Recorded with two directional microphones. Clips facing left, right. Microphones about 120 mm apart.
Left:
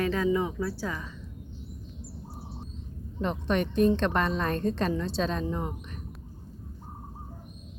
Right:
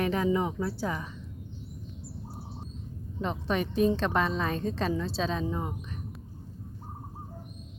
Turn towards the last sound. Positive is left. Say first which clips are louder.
# left 1 dB
turn(degrees=-5)  # may be behind; listen again after turning